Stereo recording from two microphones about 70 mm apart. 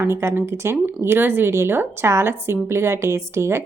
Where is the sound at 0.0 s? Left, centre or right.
Right.